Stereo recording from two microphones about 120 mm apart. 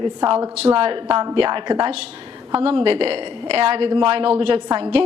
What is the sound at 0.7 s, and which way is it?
A woman's voice, 50° right (ahead or behind).